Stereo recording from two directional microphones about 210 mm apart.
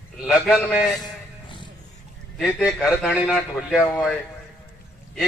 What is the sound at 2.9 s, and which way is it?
A man's voice, centre (ahead or behind).